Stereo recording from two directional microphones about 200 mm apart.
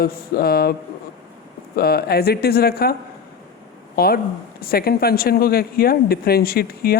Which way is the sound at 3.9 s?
50° left (ahead or behind).